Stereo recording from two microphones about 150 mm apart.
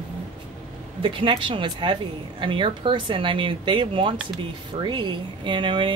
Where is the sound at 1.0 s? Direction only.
35° right (ahead or behind).